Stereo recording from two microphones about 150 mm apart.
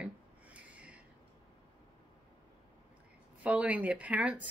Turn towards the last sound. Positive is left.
turn(degrees=-10)  # may be behind; listen again after turning